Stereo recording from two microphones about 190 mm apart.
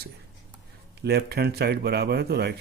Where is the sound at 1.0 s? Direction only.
55° right (ahead or behind).